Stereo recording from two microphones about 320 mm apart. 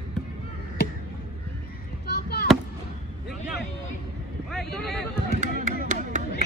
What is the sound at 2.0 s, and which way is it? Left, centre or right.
Children playing, left.